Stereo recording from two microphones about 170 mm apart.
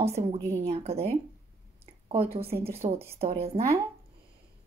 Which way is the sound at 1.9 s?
35° right (ahead or behind).